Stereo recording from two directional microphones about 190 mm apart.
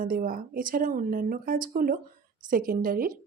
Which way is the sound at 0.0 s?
50° right (ahead or behind).